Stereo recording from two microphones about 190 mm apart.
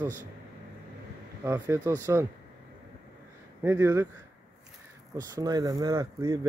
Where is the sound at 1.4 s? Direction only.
15° right (ahead or behind).